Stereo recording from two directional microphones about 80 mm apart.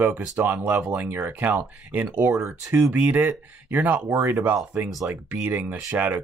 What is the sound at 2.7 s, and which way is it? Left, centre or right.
Speech, right.